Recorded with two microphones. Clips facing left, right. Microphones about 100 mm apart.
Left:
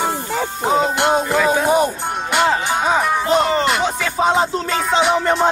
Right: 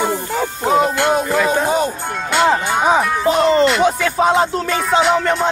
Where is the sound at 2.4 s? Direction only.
15° right (ahead or behind).